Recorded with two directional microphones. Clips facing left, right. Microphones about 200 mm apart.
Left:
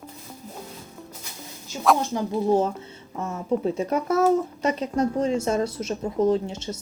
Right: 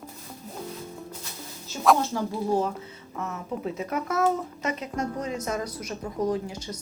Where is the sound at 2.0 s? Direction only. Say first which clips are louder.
Left 3 dB; 20° left (ahead or behind).